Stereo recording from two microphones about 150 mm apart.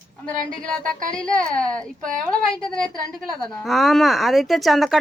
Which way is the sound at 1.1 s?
5° left (ahead or behind).